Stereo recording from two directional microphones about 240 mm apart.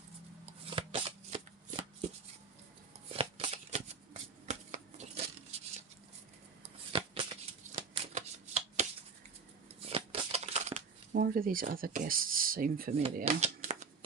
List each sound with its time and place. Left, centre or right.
0.6 s shuffling cards: right
3.1 s shuffling cards: right
6.6 s shuffling cards: right
9.8 s a sound: right
11.1 s speech: right